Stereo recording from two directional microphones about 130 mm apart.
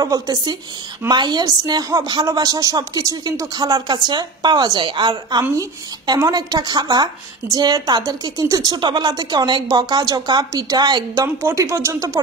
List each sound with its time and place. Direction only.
0.0 s a woman's voice: 30° right (ahead or behind)
11.4 s speech: 20° right (ahead or behind)